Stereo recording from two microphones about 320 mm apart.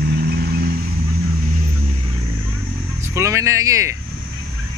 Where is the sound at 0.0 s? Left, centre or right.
Right.